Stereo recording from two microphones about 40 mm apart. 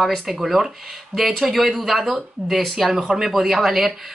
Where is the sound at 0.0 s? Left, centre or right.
Centre.